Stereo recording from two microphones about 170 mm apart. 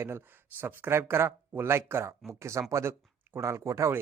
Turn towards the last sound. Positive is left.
turn(degrees=-15)  # may be behind; listen again after turning